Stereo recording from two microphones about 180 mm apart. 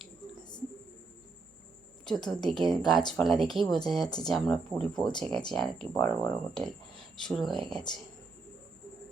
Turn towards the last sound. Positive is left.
turn(degrees=0)  # may be behind; listen again after turning